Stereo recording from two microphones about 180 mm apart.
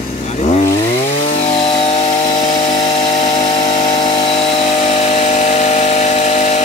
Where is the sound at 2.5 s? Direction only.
30° left (ahead or behind).